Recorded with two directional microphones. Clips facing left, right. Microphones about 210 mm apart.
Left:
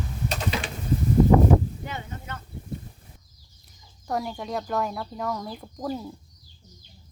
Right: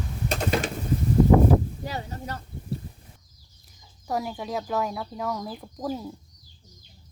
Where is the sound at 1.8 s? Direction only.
35° right (ahead or behind).